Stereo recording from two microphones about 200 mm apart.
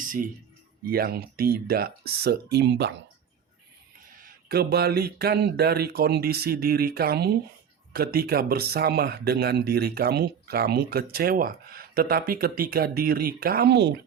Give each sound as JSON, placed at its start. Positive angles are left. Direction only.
{"t": 0.0, "sound": "a sound", "side_deg": -40}
{"t": 0.9, "sound": "speech", "side_deg": -50}
{"t": 4.2, "sound": "speech", "side_deg": -50}